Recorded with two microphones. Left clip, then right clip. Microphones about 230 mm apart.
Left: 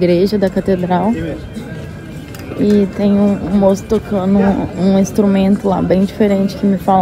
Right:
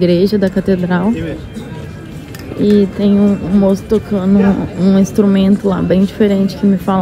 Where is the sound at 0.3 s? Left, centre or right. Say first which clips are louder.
Even; centre.